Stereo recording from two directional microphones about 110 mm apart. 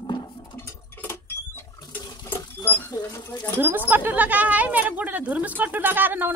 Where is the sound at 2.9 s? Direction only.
25° left (ahead or behind).